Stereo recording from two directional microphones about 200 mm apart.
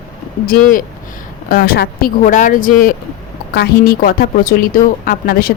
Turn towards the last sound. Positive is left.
turn(degrees=45)  # may be behind; listen again after turning